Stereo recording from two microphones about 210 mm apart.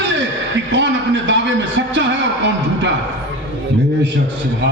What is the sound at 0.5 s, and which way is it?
A man's voice, 60° right (ahead or behind).